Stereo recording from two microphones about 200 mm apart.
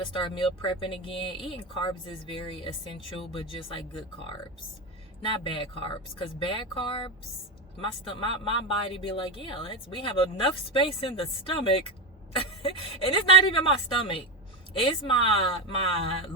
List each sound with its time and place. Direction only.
0.1 s speech: 25° left (ahead or behind)